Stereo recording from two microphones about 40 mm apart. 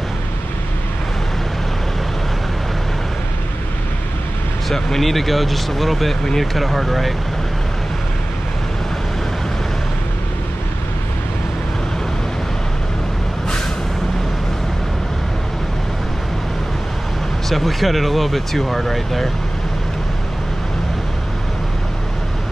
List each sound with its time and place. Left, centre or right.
4.7 s speech: centre
17.5 s speech: centre